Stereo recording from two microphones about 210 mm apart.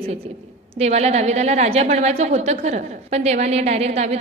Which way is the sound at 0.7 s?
30° right (ahead or behind).